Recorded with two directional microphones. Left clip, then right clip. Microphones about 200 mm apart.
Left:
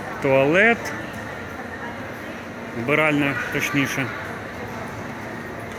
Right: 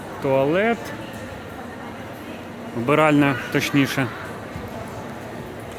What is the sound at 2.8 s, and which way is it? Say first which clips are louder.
Speech: right 3 dB; 25° right (ahead or behind).